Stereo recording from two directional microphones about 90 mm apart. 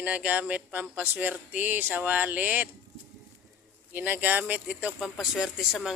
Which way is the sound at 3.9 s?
20° right (ahead or behind).